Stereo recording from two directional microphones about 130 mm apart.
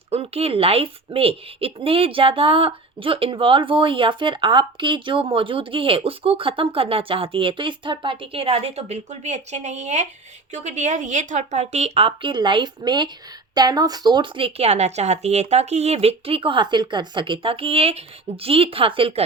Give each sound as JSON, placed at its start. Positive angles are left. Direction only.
{"t": 0.1, "sound": "speech", "side_deg": -50}